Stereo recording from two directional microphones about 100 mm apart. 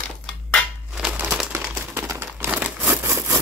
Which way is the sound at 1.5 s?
25° right (ahead or behind).